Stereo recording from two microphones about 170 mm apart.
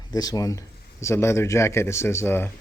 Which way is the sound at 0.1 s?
20° left (ahead or behind).